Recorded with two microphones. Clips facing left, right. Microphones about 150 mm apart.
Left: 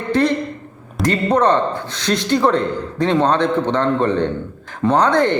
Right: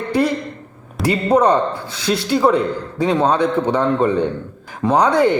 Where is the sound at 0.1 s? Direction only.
10° right (ahead or behind).